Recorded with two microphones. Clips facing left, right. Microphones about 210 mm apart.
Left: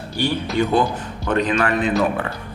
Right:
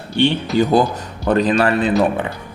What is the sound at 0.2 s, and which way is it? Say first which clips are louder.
Speech: right 7 dB; 25° right (ahead or behind).